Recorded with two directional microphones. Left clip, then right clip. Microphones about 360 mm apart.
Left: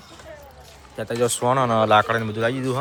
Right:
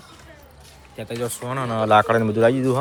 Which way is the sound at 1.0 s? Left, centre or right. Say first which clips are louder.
Left 4 dB; centre.